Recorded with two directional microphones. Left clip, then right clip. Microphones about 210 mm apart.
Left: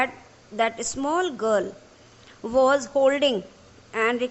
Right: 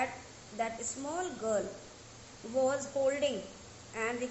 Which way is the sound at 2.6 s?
40° left (ahead or behind).